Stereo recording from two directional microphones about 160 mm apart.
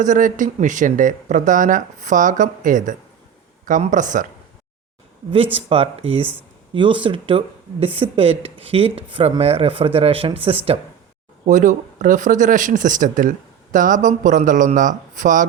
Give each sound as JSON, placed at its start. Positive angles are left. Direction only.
{"t": 0.0, "sound": "speech", "side_deg": -55}
{"t": 5.5, "sound": "speech", "side_deg": -35}
{"t": 11.4, "sound": "speech", "side_deg": -50}